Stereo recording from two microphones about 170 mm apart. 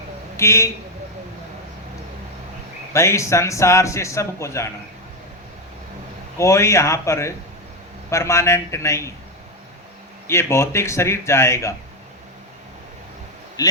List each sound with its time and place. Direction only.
0.3 s a man's voice: 15° left (ahead or behind)
2.9 s a man's voice: 15° left (ahead or behind)
6.3 s a man's voice: 15° left (ahead or behind)
10.2 s a man's voice: 15° left (ahead or behind)
13.6 s speech: 20° left (ahead or behind)